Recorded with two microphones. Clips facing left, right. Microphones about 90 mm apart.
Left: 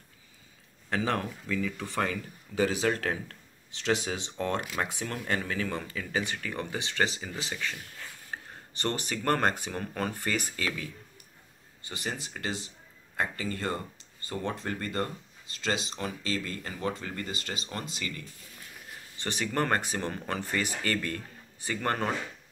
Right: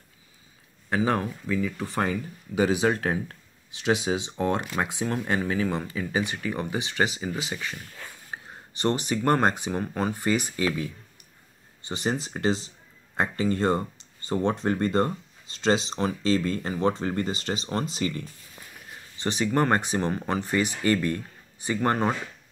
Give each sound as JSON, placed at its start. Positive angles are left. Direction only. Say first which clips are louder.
{"t": 0.8, "sound": "speech", "louder": "right 5 dB", "side_deg": -10}
{"t": 19.2, "sound": "speech", "louder": "right 6 dB", "side_deg": -20}